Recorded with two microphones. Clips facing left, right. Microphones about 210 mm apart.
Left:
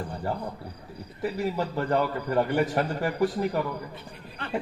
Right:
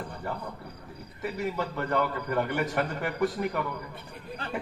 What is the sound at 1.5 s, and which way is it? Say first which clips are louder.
A man's voice: left 2 dB; 35° left (ahead or behind).